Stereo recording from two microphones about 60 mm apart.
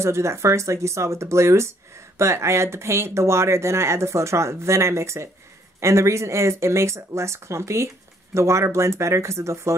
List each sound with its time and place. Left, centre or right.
0.0 s speech: right